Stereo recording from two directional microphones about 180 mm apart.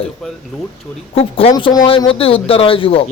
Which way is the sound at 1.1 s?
30° left (ahead or behind).